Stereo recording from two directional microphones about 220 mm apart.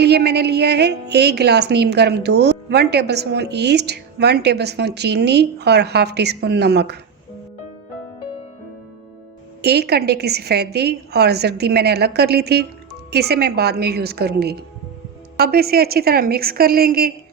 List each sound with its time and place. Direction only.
0.0 s a woman's voice: 50° right (ahead or behind)
9.6 s a woman's voice: 50° right (ahead or behind)